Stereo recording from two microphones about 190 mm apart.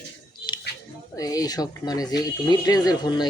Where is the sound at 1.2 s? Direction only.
20° left (ahead or behind).